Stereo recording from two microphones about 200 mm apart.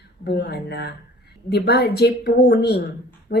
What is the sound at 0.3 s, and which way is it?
A woman's voice, 55° left (ahead or behind).